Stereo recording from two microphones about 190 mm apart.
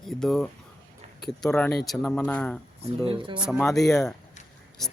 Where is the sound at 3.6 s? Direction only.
Centre (ahead or behind).